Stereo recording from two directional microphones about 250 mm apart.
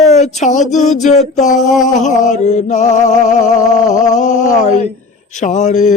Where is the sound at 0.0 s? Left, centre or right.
Left.